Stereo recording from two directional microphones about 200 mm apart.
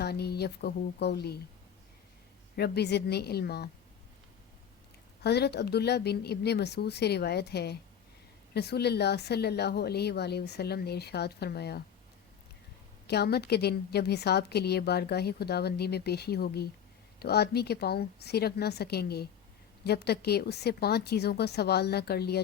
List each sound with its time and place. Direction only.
0.0 s a woman's voice: 55° left (ahead or behind)
2.6 s speech: 55° left (ahead or behind)
5.2 s speech: 55° left (ahead or behind)
13.1 s a woman's voice: 55° left (ahead or behind)